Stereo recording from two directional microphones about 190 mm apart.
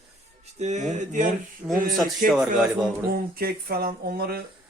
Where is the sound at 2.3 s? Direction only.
Centre (ahead or behind).